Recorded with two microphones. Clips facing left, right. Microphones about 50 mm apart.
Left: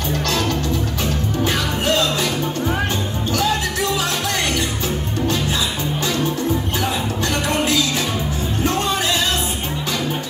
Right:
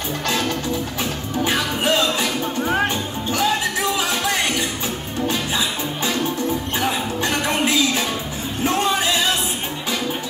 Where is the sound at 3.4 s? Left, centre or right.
Centre.